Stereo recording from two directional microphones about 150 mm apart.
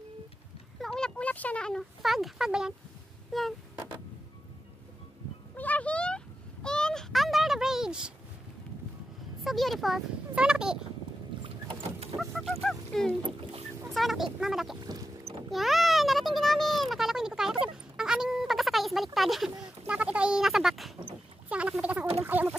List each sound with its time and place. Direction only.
0.7 s speech: 5° left (ahead or behind)
5.6 s a sound: 10° left (ahead or behind)
9.4 s speech: centre (ahead or behind)
12.2 s speech: centre (ahead or behind)
13.4 s speech: 40° right (ahead or behind)
13.9 s speech: centre (ahead or behind)
14.8 s boat: 25° right (ahead or behind)
15.5 s a child's voice: centre (ahead or behind)
17.9 s a sound: 5° right (ahead or behind)
19.1 s speech: centre (ahead or behind)
21.5 s a sound: 10° right (ahead or behind)